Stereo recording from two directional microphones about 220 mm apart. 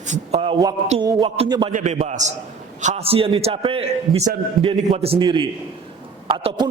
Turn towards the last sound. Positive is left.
turn(degrees=-25)  # may be behind; listen again after turning